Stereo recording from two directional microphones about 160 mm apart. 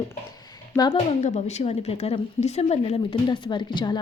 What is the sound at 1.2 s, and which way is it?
A woman's voice, 45° left (ahead or behind).